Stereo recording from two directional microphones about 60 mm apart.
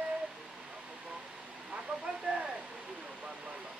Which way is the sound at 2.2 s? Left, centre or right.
Centre.